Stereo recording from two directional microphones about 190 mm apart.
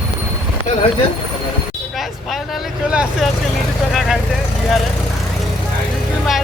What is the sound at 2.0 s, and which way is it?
Vehicle, centre (ahead or behind).